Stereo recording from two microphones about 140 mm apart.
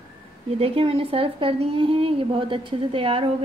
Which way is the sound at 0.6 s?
45° right (ahead or behind).